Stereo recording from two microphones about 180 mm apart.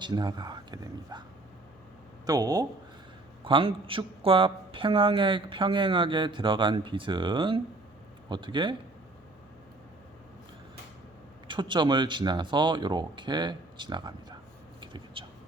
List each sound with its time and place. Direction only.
0.0 s speech: 25° right (ahead or behind)
2.2 s speech: 20° right (ahead or behind)
11.4 s speech: 25° right (ahead or behind)
14.8 s a sound: 25° right (ahead or behind)